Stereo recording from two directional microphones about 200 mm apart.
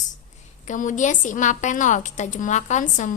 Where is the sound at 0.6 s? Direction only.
40° left (ahead or behind).